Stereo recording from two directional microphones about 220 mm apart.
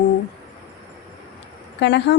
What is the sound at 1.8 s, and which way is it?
Speech, 50° left (ahead or behind).